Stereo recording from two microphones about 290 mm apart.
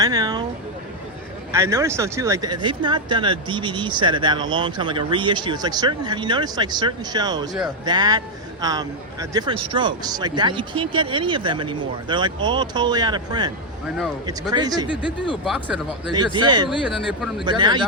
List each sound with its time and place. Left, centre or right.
0.0 s speech: centre
1.5 s speech: centre
15.4 s speech: centre
16.1 s speech: centre
16.6 s speech: centre
17.4 s speech: centre